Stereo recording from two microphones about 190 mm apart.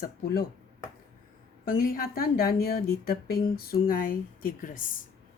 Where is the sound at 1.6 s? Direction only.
50° left (ahead or behind).